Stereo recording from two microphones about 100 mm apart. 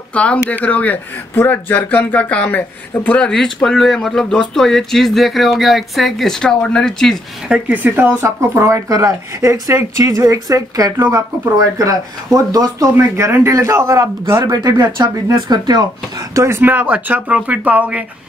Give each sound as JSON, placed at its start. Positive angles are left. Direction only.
{"t": 0.1, "sound": "speech", "side_deg": 10}
{"t": 7.4, "sound": "speech", "side_deg": -10}
{"t": 12.9, "sound": "a man's voice", "side_deg": -25}
{"t": 14.4, "sound": "speech", "side_deg": -40}
{"t": 16.3, "sound": "speech", "side_deg": -25}